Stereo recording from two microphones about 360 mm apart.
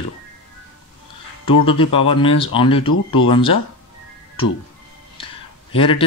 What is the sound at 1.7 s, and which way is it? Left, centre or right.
Speech, centre.